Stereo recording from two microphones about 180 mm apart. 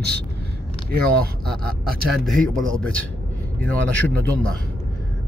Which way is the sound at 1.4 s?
5° left (ahead or behind).